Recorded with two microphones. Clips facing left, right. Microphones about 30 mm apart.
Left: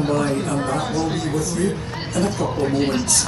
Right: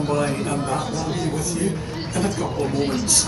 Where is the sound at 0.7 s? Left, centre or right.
Centre.